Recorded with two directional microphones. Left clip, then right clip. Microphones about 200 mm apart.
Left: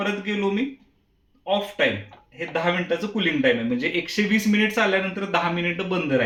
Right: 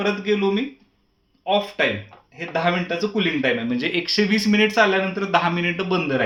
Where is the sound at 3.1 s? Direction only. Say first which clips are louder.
Left 1 dB; 40° right (ahead or behind).